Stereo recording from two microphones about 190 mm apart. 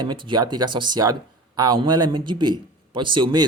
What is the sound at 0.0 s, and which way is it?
A man's voice, 25° right (ahead or behind).